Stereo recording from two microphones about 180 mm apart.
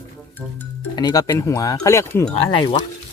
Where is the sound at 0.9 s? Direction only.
20° left (ahead or behind).